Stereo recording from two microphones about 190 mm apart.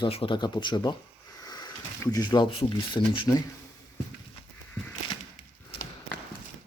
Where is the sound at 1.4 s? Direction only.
20° left (ahead or behind).